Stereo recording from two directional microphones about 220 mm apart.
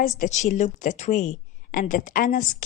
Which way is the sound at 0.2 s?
30° left (ahead or behind).